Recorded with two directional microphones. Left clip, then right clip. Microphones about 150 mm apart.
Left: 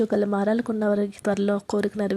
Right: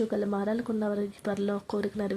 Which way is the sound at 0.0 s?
40° left (ahead or behind).